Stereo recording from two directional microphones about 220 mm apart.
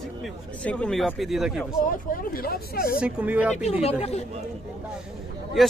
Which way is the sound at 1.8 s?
40° left (ahead or behind).